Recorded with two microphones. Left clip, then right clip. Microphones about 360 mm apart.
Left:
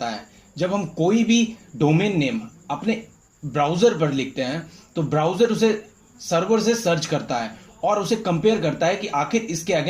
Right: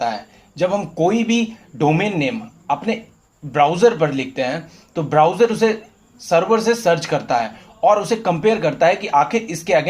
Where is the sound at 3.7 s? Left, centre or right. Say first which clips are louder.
Right 4 dB; right.